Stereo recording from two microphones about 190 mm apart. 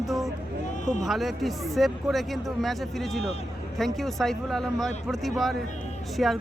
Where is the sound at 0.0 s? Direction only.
Centre (ahead or behind).